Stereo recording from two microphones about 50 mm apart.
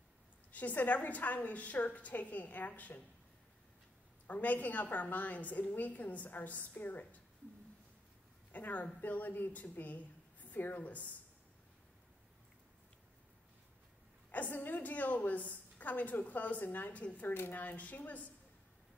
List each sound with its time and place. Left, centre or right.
0.5 s a woman's voice: left
4.3 s a woman's voice: left
8.5 s a woman's voice: left
14.3 s a woman's voice: left
17.3 s speech: left
17.6 s a woman's voice: left